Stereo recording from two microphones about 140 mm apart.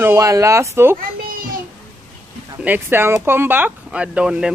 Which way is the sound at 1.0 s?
90° right.